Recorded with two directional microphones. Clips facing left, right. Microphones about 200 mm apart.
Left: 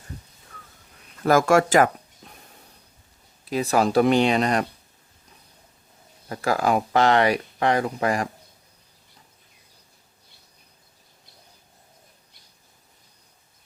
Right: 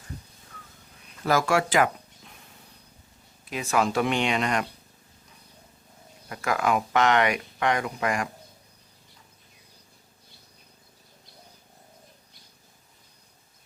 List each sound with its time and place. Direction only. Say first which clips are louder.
1.2 s speech: left 6 dB; 50° left (ahead or behind)
2.2 s snake: left 3 dB; 40° left (ahead or behind)
3.4 s speech: left 4 dB; 35° left (ahead or behind)
6.2 s speech: left 3 dB; 35° left (ahead or behind)